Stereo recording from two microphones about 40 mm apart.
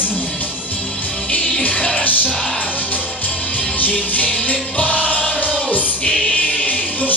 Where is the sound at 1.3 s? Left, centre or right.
Left.